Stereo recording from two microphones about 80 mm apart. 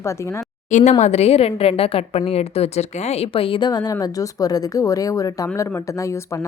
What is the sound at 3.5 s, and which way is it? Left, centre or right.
Speech, left.